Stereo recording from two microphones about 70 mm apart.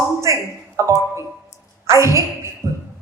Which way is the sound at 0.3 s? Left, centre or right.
Right.